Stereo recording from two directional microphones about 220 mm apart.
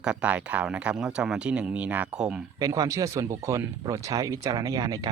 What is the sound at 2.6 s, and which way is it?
Speech, 15° right (ahead or behind).